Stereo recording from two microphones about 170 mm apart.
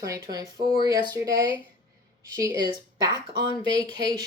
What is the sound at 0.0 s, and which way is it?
A woman's voice, 20° right (ahead or behind).